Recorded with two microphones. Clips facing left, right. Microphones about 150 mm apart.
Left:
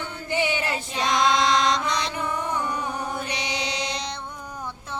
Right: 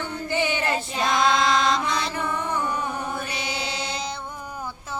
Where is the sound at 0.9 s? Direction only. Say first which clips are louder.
Left 1 dB; 5° right (ahead or behind).